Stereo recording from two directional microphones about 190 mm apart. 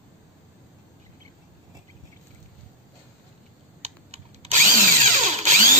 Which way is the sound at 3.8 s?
35° right (ahead or behind).